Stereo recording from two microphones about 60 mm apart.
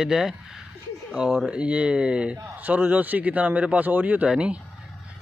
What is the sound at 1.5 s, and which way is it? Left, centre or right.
Speech, centre.